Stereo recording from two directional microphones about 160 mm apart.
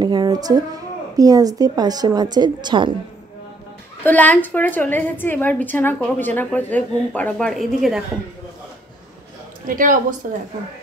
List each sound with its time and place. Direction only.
0.0 s speech: 30° right (ahead or behind)
4.0 s a woman's voice: 10° left (ahead or behind)
9.7 s a woman's voice: 60° right (ahead or behind)